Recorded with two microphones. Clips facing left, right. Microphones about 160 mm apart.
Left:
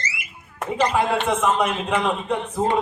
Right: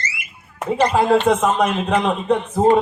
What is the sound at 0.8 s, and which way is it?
A man's voice, 35° right (ahead or behind).